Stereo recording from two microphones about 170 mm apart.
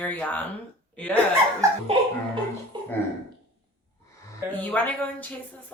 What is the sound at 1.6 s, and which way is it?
Speech, 20° right (ahead or behind).